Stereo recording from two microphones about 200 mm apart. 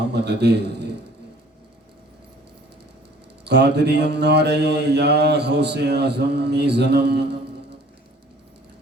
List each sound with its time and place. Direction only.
0.0 s a man's voice: 55° right (ahead or behind)
3.4 s mantra: 55° right (ahead or behind)